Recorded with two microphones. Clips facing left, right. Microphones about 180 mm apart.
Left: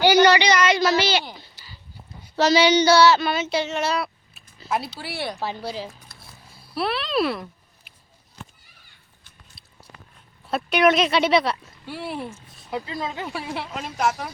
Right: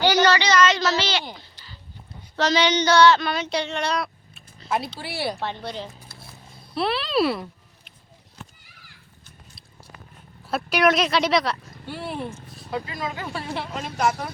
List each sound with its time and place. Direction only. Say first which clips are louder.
0.0 s a woman's voice: left 3 dB; 10° left (ahead or behind)
2.3 s female singing: left 4 dB; 10° left (ahead or behind)
5.4 s speech: left 1 dB; 5° left (ahead or behind)
10.5 s speech: left 2 dB; centre (ahead or behind)
12.7 s speech: left 1 dB; 25° left (ahead or behind)
13.3 s speech: even; 5° left (ahead or behind)